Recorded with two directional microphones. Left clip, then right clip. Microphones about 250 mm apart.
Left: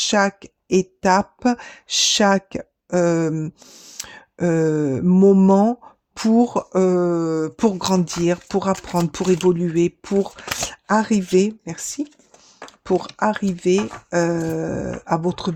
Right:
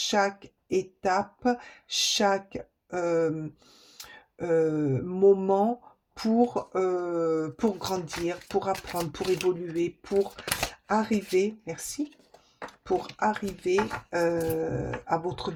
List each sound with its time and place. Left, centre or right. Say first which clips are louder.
0.0 s speech: left 7 dB; left